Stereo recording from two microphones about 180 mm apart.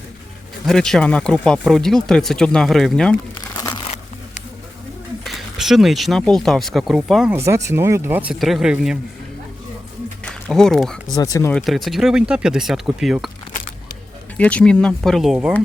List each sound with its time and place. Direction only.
0.6 s speech: centre (ahead or behind)
3.6 s crumpling: 20° left (ahead or behind)
3.8 s a sound: 40° left (ahead or behind)
5.2 s speech: centre (ahead or behind)
7.3 s speech: 15° right (ahead or behind)
10.2 s speech: 5° left (ahead or behind)
11.1 s speech: 20° left (ahead or behind)
11.5 s speech: centre (ahead or behind)
14.3 s speech: 5° left (ahead or behind)